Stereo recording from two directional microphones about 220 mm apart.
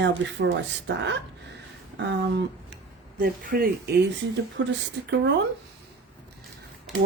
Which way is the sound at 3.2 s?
40° right (ahead or behind).